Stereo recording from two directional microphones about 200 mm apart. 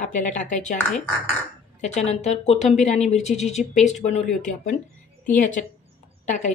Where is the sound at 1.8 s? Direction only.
35° left (ahead or behind).